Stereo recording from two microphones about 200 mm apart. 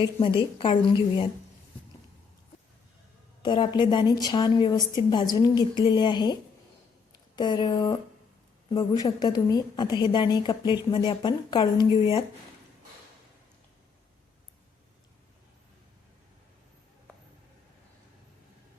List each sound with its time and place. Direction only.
0.2 s a woman's voice: 25° left (ahead or behind)
3.4 s a woman's voice: 25° left (ahead or behind)
7.3 s a woman's voice: 20° left (ahead or behind)